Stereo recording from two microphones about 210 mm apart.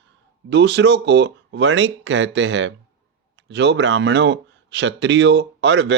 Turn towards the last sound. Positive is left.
turn(degrees=-55)  # may be behind; listen again after turning